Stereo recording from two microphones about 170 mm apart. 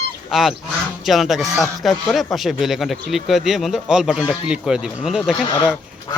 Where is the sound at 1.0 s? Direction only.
Centre (ahead or behind).